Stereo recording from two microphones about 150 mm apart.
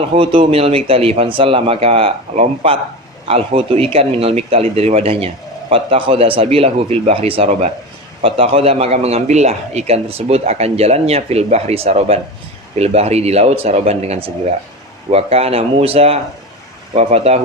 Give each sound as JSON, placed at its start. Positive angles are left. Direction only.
{"t": 0.0, "sound": "a man's voice", "side_deg": -35}